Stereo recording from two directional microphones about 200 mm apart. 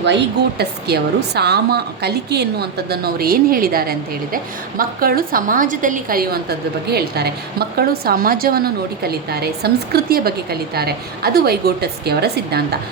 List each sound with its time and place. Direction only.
0.6 s a woman's voice: 55° right (ahead or behind)